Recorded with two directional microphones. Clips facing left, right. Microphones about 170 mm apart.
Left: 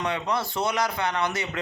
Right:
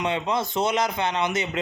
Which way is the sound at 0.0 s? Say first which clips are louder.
Right 2 dB; 20° right (ahead or behind).